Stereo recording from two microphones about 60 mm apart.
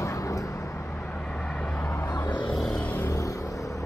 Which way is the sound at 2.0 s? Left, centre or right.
Left.